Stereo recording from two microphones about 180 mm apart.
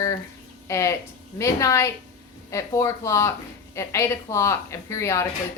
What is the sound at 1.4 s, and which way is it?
Speech, 15° left (ahead or behind).